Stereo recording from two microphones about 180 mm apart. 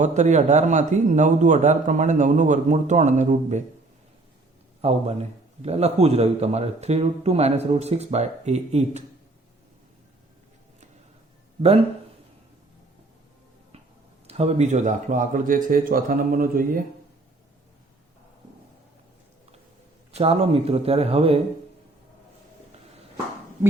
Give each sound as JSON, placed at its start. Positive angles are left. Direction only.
{"t": 0.0, "sound": "a man's voice", "side_deg": -40}
{"t": 4.8, "sound": "speech", "side_deg": -35}
{"t": 14.3, "sound": "a man's voice", "side_deg": -35}
{"t": 20.1, "sound": "speech", "side_deg": -35}